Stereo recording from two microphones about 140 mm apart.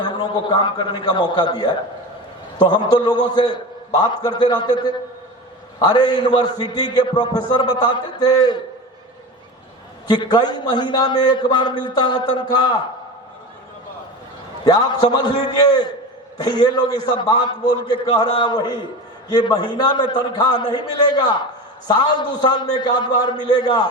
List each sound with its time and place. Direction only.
0.0 s a man's voice: 30° left (ahead or behind)
10.1 s a man's voice: 30° left (ahead or behind)
14.6 s a man's voice: 30° left (ahead or behind)
16.4 s a man's voice: 30° left (ahead or behind)